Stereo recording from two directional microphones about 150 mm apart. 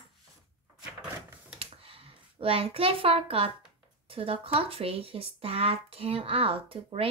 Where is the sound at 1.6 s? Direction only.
40° right (ahead or behind).